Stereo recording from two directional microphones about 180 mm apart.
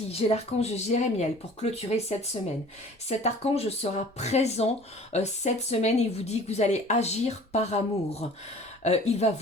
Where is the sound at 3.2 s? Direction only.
35° left (ahead or behind).